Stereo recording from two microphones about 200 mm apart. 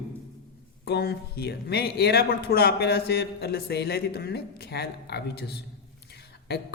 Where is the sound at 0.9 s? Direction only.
55° left (ahead or behind).